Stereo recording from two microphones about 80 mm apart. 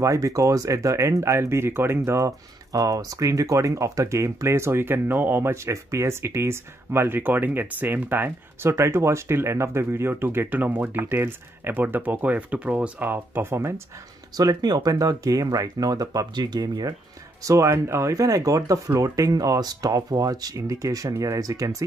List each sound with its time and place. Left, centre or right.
0.0 s speech: right
14.3 s speech: right
17.4 s speech: right